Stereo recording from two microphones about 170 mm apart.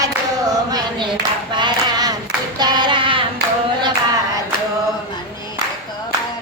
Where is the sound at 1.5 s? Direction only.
25° right (ahead or behind).